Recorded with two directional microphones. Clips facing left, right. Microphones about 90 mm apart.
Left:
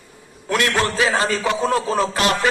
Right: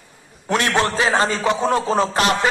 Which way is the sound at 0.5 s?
30° right (ahead or behind).